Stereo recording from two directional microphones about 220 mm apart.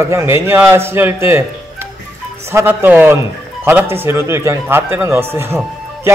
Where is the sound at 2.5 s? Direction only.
10° right (ahead or behind).